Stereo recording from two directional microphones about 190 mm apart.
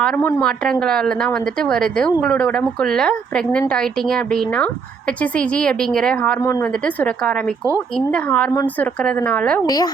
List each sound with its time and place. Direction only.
0.0 s a woman's voice: 5° left (ahead or behind)
9.6 s speech: 20° left (ahead or behind)